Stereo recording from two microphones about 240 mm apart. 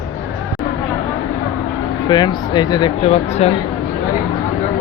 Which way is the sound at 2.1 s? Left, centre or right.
Centre.